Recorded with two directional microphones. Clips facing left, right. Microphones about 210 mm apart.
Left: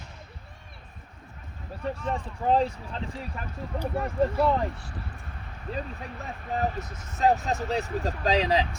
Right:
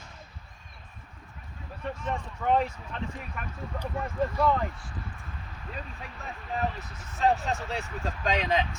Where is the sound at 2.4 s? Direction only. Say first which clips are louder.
Left 2 dB; 30° left (ahead or behind).